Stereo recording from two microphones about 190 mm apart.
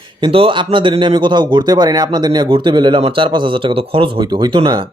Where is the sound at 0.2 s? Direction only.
30° right (ahead or behind).